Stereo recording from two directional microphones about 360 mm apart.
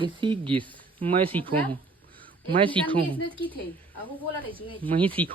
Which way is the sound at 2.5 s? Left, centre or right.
Centre.